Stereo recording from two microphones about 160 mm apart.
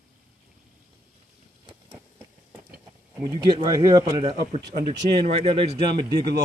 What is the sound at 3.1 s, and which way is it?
Speech, 25° right (ahead or behind).